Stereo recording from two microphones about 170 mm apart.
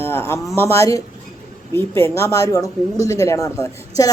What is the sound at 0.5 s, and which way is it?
A man's voice, 15° left (ahead or behind).